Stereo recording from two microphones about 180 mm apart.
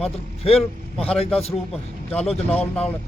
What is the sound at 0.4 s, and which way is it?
Speech, 35° left (ahead or behind).